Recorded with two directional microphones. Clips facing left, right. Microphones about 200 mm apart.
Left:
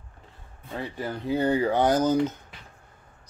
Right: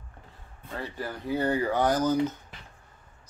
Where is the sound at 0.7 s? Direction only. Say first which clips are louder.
Left 3 dB; 20° left (ahead or behind).